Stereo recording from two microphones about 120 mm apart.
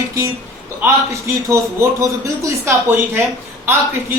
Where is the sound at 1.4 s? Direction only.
25° right (ahead or behind).